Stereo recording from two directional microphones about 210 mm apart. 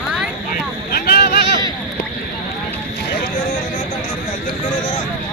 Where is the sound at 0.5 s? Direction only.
45° left (ahead or behind).